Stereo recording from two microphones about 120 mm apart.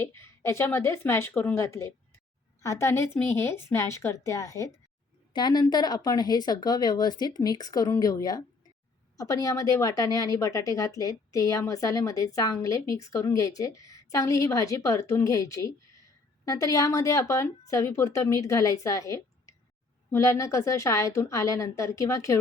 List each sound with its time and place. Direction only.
0.0 s a woman's voice: 20° left (ahead or behind)